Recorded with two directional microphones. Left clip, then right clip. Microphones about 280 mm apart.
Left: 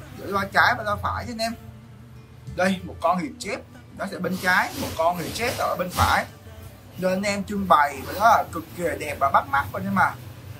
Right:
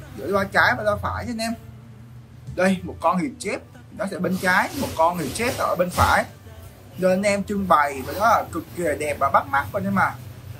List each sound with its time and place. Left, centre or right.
0.3 s speech: centre